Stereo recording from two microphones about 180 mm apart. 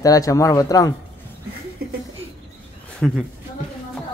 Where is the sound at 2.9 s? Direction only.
Centre (ahead or behind).